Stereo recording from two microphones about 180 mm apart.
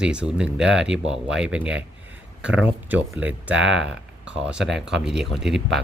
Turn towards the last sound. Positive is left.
turn(degrees=0)  # may be behind; listen again after turning